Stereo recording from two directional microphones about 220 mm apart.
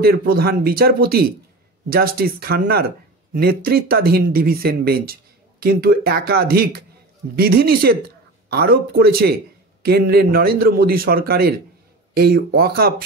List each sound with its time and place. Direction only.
0.0 s speech: 45° right (ahead or behind)